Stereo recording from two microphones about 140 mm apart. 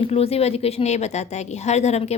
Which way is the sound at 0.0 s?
45° left (ahead or behind).